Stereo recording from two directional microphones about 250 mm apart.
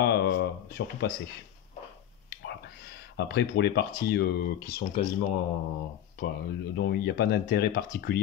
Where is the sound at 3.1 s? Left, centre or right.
Left.